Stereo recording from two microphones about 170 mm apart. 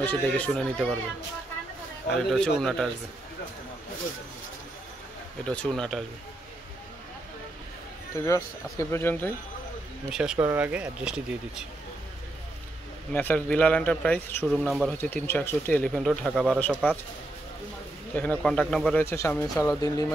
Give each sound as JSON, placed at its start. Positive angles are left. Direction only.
{"t": 0.0, "sound": "speech", "side_deg": 10}
{"t": 2.0, "sound": "speech", "side_deg": 5}
{"t": 5.4, "sound": "speech", "side_deg": 5}
{"t": 8.2, "sound": "speech", "side_deg": 20}
{"t": 10.1, "sound": "speech", "side_deg": -5}
{"t": 13.1, "sound": "speech", "side_deg": 10}
{"t": 18.1, "sound": "speech", "side_deg": 10}